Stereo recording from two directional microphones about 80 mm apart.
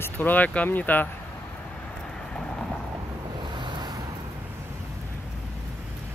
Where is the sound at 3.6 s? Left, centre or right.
Right.